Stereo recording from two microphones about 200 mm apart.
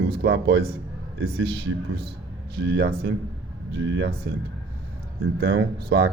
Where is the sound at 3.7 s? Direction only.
65° right (ahead or behind).